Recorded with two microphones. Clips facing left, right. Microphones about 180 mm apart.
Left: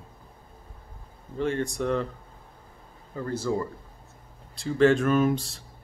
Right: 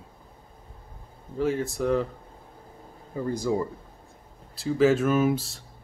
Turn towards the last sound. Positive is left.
turn(degrees=0)  # may be behind; listen again after turning